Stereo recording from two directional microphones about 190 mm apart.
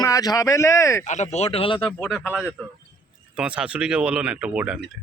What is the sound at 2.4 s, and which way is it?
Speech, 5° right (ahead or behind).